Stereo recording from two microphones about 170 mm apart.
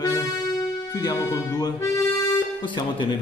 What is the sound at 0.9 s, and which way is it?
Music, 20° left (ahead or behind).